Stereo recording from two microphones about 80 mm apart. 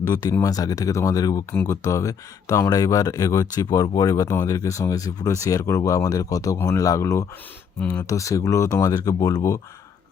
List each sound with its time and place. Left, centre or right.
0.1 s speech: left